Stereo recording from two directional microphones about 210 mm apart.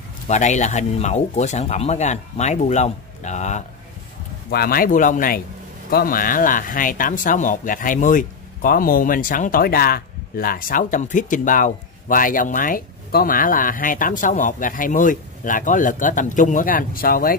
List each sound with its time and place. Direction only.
0.3 s speech: 35° left (ahead or behind)
4.5 s speech: 45° left (ahead or behind)